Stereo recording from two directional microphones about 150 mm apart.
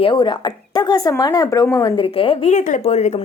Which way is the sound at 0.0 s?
30° left (ahead or behind).